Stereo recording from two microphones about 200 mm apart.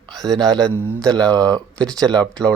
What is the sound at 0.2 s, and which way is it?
Speech, centre (ahead or behind).